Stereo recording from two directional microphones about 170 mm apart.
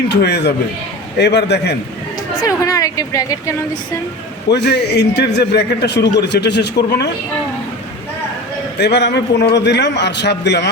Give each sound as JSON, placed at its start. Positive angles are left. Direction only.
{"t": 0.1, "sound": "a man's voice", "side_deg": 75}
{"t": 2.4, "sound": "speech", "side_deg": 20}
{"t": 4.5, "sound": "a man's voice", "side_deg": 80}
{"t": 8.8, "sound": "a man's voice", "side_deg": 80}